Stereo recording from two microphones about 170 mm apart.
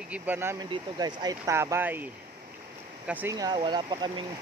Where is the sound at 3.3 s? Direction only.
25° right (ahead or behind).